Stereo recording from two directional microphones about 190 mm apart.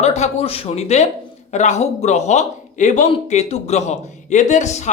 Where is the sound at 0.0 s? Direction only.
35° left (ahead or behind).